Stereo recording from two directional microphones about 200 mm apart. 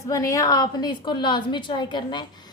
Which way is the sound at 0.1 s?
15° left (ahead or behind).